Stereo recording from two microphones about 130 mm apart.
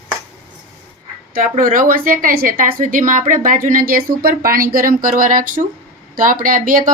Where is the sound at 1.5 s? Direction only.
90° right.